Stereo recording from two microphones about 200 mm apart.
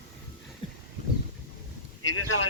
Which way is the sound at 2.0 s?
75° left (ahead or behind).